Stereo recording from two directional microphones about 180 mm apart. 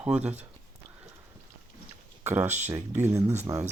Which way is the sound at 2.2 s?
10° right (ahead or behind).